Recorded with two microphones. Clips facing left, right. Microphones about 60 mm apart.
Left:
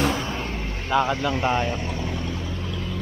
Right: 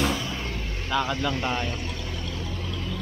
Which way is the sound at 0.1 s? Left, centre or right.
Left.